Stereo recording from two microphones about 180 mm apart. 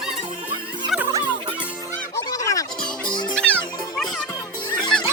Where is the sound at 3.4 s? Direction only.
5° left (ahead or behind).